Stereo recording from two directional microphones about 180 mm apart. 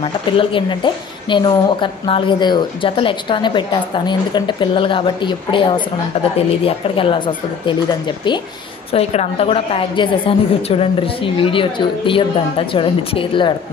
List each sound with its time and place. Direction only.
0.0 s a woman's voice: 30° left (ahead or behind)
8.9 s a woman's voice: 35° left (ahead or behind)